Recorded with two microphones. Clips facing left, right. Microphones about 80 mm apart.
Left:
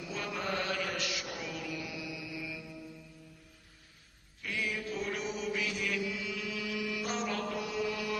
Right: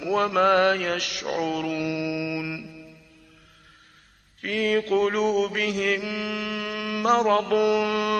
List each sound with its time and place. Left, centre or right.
0.0 s mantra: right
4.4 s mantra: right